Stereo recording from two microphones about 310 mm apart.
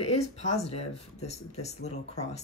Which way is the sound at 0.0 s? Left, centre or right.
Left.